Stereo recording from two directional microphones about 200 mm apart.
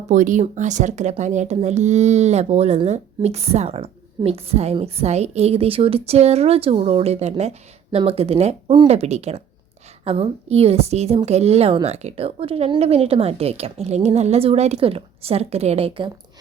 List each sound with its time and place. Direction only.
0.1 s speech: 40° right (ahead or behind)